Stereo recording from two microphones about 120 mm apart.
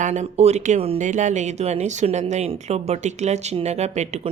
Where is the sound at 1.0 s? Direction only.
90° right.